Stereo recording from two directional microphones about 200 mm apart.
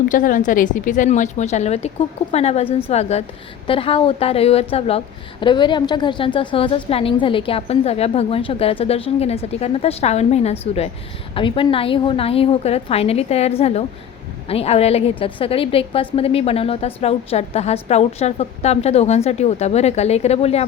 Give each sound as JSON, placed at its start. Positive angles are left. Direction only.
{"t": 0.1, "sound": "a woman's voice", "side_deg": 40}